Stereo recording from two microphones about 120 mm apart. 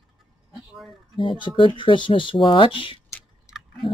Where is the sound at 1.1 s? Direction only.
45° left (ahead or behind).